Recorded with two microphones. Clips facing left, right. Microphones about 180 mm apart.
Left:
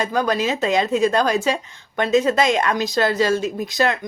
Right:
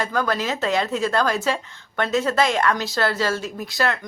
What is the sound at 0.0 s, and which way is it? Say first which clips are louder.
A woman's voice: left 3 dB; 20° left (ahead or behind).